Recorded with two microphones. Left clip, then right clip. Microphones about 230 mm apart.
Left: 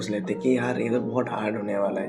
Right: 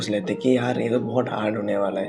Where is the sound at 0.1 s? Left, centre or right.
Right.